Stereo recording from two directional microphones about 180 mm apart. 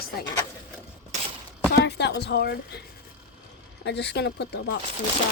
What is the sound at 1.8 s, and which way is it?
Speech, 70° left (ahead or behind).